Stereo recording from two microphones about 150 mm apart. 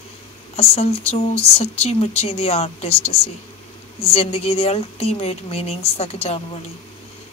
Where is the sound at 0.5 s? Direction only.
40° left (ahead or behind).